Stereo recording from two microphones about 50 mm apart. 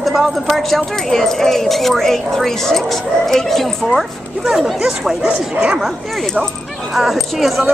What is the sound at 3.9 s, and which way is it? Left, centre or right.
Speech, centre.